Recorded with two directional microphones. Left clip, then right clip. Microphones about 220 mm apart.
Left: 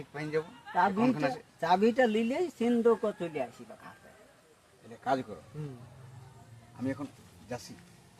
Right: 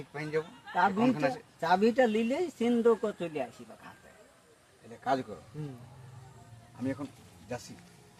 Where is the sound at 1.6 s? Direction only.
5° left (ahead or behind).